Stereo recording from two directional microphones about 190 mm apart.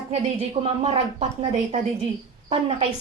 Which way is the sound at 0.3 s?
30° right (ahead or behind).